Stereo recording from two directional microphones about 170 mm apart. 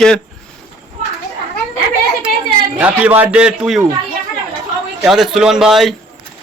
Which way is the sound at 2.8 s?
10° right (ahead or behind).